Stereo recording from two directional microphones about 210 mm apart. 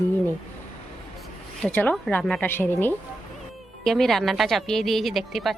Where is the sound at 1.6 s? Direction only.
5° left (ahead or behind).